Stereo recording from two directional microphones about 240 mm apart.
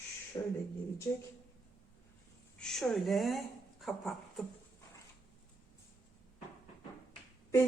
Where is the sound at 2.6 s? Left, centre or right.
Centre.